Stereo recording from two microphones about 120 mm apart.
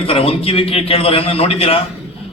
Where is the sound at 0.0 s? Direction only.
55° left (ahead or behind).